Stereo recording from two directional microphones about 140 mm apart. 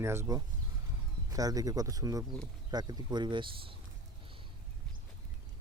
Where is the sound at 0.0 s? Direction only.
20° right (ahead or behind); by 3.8 s 35° right (ahead or behind).